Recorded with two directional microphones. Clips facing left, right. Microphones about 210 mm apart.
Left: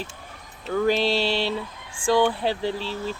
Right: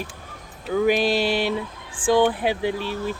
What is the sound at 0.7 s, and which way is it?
Speech, 10° right (ahead or behind).